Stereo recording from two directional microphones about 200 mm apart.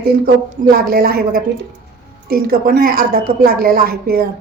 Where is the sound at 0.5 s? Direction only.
45° right (ahead or behind).